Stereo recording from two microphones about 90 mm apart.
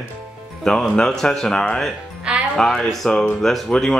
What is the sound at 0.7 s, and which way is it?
A man's voice, 5° left (ahead or behind).